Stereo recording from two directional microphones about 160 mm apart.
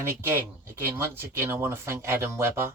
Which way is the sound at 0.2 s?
15° right (ahead or behind).